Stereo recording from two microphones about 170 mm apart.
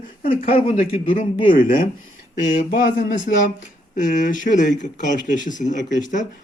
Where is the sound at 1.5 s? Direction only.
55° left (ahead or behind).